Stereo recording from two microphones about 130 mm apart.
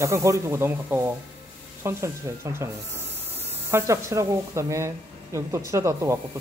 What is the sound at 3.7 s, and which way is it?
Speech, 20° right (ahead or behind).